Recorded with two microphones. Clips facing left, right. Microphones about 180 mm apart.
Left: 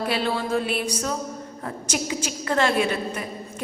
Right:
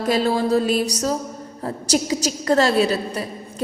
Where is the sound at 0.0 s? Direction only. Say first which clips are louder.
Right 6 dB; 40° right (ahead or behind).